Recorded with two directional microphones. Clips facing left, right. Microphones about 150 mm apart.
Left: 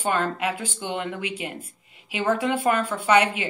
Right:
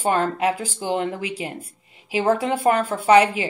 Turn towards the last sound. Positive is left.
turn(degrees=-35)  # may be behind; listen again after turning